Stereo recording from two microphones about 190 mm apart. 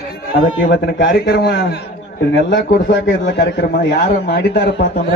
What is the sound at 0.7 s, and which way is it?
A man's voice, 65° left (ahead or behind).